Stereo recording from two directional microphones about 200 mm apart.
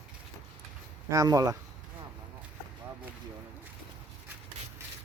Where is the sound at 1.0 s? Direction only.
15° right (ahead or behind).